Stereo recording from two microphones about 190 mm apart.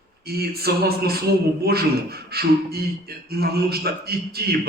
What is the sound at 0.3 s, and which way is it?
A man's voice, 55° right (ahead or behind).